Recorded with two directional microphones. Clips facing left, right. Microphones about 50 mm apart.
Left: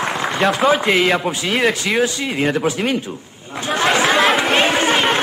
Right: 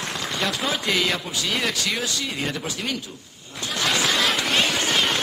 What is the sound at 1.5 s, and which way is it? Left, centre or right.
Speech, left.